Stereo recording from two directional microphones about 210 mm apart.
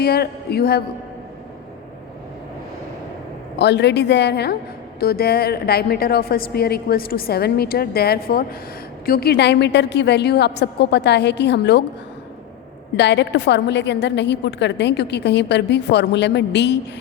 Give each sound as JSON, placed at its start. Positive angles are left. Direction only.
{"t": 0.0, "sound": "a woman's voice", "side_deg": 50}
{"t": 3.6, "sound": "a woman's voice", "side_deg": 55}
{"t": 13.0, "sound": "a woman's voice", "side_deg": 55}